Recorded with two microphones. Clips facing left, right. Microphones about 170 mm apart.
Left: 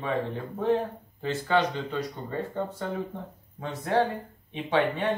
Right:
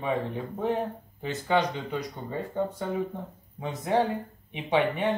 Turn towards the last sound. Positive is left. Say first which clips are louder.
# even
turn(degrees=-20)  # may be behind; listen again after turning